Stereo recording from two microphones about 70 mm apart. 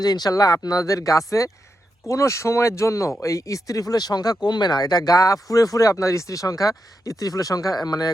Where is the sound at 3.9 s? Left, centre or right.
Left.